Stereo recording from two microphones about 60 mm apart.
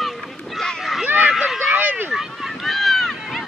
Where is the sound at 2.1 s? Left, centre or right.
Centre.